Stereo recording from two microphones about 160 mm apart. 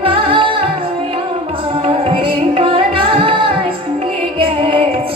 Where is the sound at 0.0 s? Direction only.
35° right (ahead or behind).